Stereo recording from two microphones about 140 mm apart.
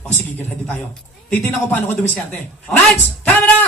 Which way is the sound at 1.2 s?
15° left (ahead or behind).